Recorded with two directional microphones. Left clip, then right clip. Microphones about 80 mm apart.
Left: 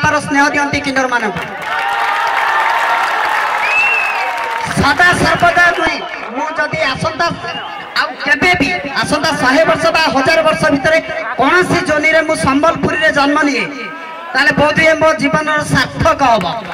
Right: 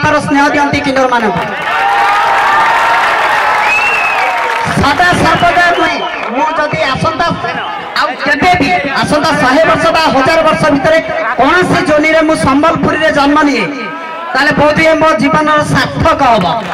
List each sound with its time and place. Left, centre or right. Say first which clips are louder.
0.0 s a man's voice: right 3 dB; left
4.8 s a man's voice: right 1 dB; left